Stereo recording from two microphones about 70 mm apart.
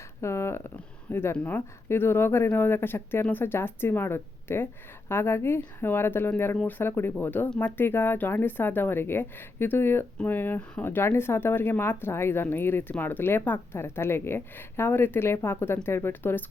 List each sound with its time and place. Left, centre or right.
0.2 s a woman's voice: left